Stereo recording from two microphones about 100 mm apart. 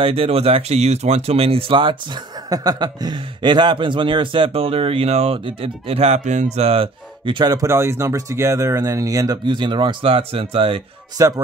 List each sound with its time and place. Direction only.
0.0 s speech: 70° right (ahead or behind)
7.4 s speech: 35° right (ahead or behind)
9.4 s speech: 50° right (ahead or behind)
11.1 s speech: 35° right (ahead or behind)